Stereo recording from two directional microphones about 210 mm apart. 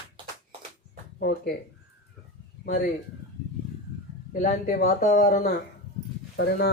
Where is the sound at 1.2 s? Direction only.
50° left (ahead or behind).